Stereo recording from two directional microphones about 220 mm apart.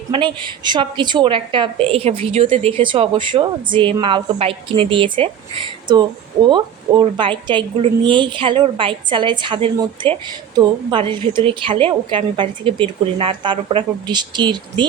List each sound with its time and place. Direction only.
0.1 s a woman's voice: 20° right (ahead or behind)